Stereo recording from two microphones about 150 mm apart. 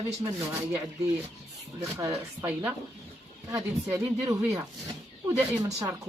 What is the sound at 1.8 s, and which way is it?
Speech, 20° right (ahead or behind).